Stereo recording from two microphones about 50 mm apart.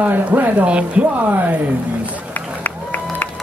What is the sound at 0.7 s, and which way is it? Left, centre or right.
Speech, right.